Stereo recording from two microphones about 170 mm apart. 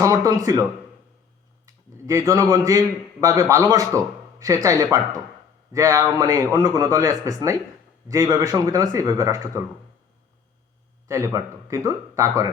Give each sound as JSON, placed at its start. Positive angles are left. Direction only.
{"t": 0.0, "sound": "speech", "side_deg": -20}
{"t": 1.6, "sound": "speech", "side_deg": -15}
{"t": 11.1, "sound": "speech", "side_deg": -15}